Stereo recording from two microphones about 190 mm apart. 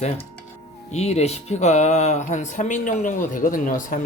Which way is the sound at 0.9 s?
35° left (ahead or behind).